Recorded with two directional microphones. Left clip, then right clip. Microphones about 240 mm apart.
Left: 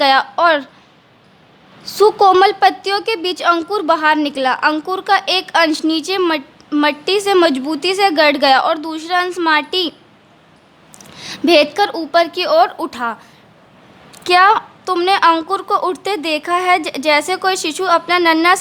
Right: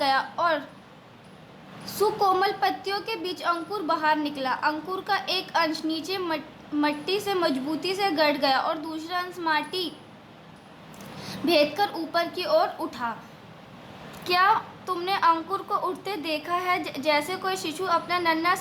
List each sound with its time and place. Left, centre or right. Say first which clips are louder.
0.0 s a sound: left 12 dB; left
1.8 s a woman's voice: left 13 dB; left
10.9 s a woman's voice: left 8 dB; left
14.3 s a woman's voice: left 11 dB; left